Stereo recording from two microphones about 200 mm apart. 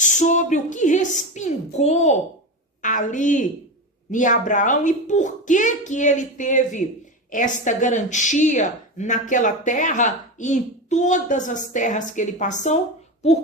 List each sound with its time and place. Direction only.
0.0 s a woman's voice: 40° left (ahead or behind)